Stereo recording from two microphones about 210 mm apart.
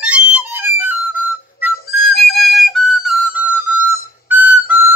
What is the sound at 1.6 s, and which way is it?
Music, centre (ahead or behind).